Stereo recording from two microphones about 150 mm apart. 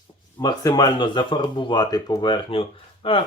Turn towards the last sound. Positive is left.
turn(degrees=35)  # may be behind; listen again after turning